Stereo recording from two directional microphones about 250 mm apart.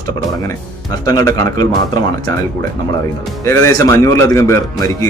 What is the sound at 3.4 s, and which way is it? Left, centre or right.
Speech, centre.